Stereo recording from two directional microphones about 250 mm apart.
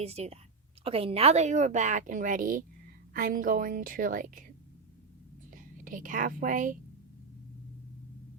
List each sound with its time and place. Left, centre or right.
0.0 s a woman's voice: right
5.5 s a woman's voice: right